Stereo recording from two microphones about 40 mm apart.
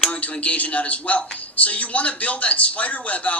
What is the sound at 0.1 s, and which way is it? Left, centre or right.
A man's voice, left.